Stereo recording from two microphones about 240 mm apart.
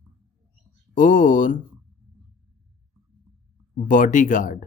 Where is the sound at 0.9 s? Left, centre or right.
Left.